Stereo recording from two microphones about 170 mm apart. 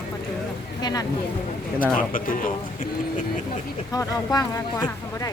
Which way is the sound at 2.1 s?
50° left (ahead or behind).